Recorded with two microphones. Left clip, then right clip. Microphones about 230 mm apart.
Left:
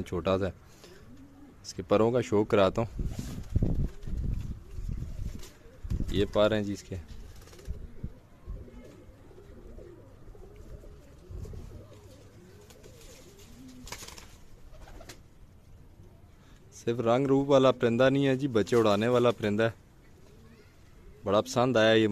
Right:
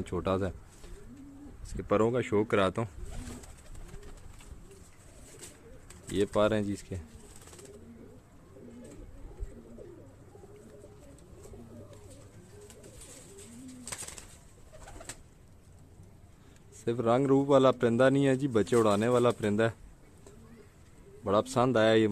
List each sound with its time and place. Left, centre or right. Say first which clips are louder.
0.0 s a man's voice: left 2 dB; centre
1.7 s speech: left 2 dB; centre
6.1 s a man's voice: left 2 dB; centre
16.8 s a man's voice: left 1 dB; centre
21.2 s a man's voice: left 1 dB; centre